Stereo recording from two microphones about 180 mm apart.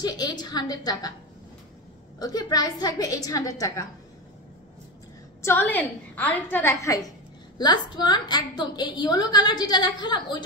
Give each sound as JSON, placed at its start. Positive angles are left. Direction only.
{"t": 0.0, "sound": "a woman's voice", "side_deg": 20}
{"t": 2.1, "sound": "a woman's voice", "side_deg": 20}
{"t": 5.4, "sound": "a woman's voice", "side_deg": 10}